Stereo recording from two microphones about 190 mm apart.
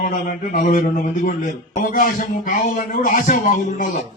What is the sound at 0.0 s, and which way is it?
A man's voice, 45° left (ahead or behind).